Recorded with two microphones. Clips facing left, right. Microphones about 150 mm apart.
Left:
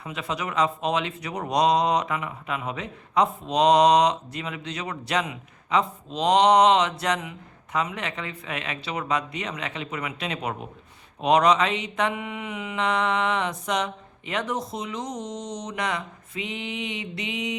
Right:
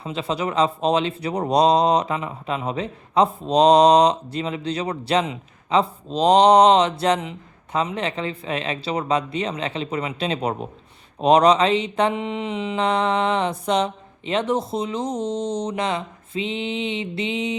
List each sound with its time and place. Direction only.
0.0 s speech: 30° right (ahead or behind)
11.2 s mantra: 30° right (ahead or behind)